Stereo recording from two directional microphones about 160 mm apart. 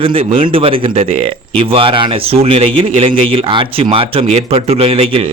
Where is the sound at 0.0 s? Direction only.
35° right (ahead or behind).